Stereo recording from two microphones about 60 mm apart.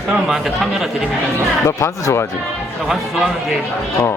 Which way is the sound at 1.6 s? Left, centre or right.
Left.